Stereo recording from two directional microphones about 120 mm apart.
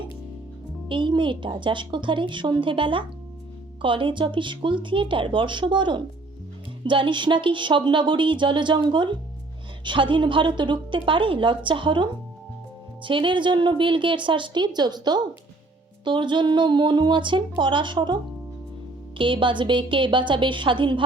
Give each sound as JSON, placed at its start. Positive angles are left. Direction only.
{"t": 0.9, "sound": "a woman's voice", "side_deg": -45}